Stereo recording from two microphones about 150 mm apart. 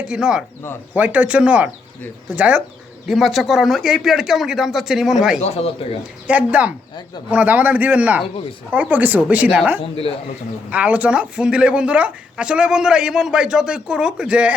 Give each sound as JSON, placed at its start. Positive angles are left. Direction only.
{"t": 0.1, "sound": "speech", "side_deg": -5}
{"t": 5.4, "sound": "speech", "side_deg": 45}
{"t": 6.0, "sound": "speech", "side_deg": -10}